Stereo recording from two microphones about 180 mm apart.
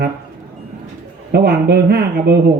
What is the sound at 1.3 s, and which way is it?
Speech, 60° right (ahead or behind).